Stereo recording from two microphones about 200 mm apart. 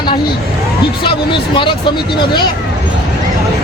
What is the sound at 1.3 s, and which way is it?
Speech, 25° left (ahead or behind).